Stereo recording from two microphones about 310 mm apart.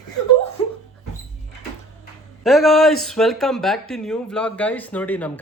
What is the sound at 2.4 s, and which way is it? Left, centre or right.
Speech, centre.